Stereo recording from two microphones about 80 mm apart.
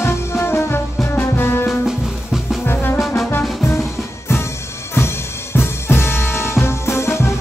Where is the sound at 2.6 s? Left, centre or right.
Left.